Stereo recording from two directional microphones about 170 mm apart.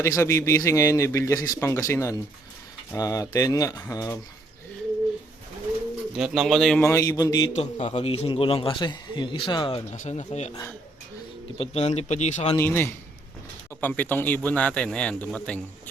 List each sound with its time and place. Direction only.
0.0 s a man's voice: 15° left (ahead or behind)
6.1 s speech: centre (ahead or behind)
6.8 s speech: 20° left (ahead or behind)
7.5 s a man's voice: 40° left (ahead or behind)
9.9 s speech: 45° left (ahead or behind)
11.5 s a man's voice: 35° left (ahead or behind)
12.5 s a man's voice: 15° left (ahead or behind)